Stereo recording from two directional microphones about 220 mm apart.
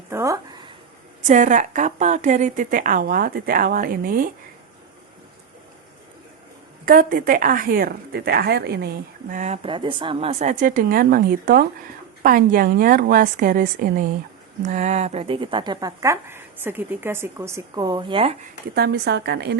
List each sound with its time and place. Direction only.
0.1 s speech: 15° right (ahead or behind)
1.3 s a woman's voice: 35° right (ahead or behind)
6.8 s a woman's voice: 40° right (ahead or behind)
9.3 s a woman's voice: 30° right (ahead or behind)
18.7 s speech: 50° right (ahead or behind)